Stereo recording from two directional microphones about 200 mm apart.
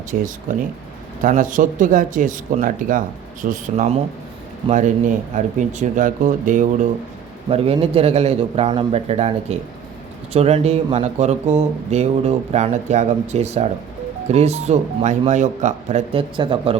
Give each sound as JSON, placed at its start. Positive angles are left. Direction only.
{"t": 0.1, "sound": "speech", "side_deg": -40}